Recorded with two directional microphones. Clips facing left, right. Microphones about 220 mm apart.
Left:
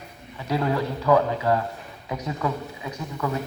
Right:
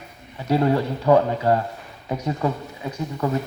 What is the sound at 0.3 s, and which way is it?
A man's voice, 30° right (ahead or behind).